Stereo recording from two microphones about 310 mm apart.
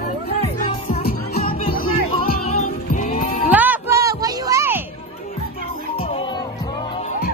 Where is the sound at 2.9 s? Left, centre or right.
Left.